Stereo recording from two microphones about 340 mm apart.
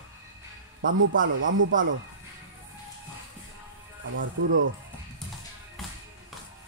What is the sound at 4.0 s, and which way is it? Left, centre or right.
Speech, right.